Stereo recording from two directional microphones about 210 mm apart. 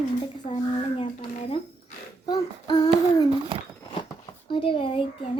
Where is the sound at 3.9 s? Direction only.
25° left (ahead or behind).